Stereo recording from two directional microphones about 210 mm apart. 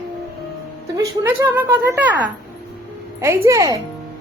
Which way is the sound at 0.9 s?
15° right (ahead or behind).